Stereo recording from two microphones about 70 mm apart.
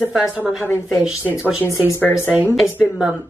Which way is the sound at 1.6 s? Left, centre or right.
Left.